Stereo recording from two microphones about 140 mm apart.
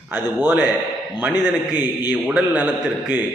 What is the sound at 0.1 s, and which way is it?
Speech, 15° right (ahead or behind).